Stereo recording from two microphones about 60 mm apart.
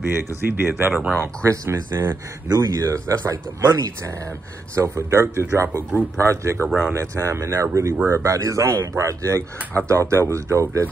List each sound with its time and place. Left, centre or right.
0.0 s speech: right
1.4 s speech: right
2.6 s speech: right
4.8 s speech: right